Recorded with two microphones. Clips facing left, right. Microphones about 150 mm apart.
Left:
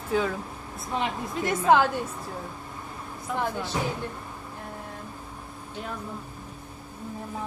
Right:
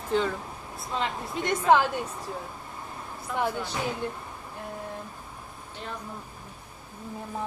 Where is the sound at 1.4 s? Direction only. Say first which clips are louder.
Left 1 dB; 5° left (ahead or behind).